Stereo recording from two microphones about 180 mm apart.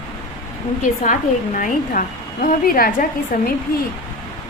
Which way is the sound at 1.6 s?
45° left (ahead or behind).